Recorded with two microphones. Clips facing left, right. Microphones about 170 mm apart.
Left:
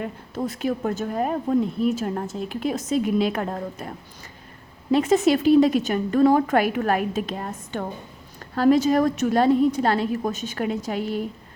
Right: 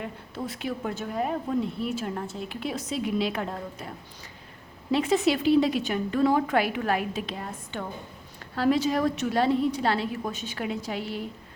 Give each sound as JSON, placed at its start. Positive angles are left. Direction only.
{"t": 0.0, "sound": "a woman's voice", "side_deg": 40}